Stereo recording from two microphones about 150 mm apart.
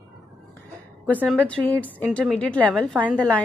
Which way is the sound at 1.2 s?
10° left (ahead or behind).